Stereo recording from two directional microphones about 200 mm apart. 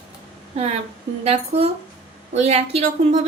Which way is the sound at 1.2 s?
30° right (ahead or behind).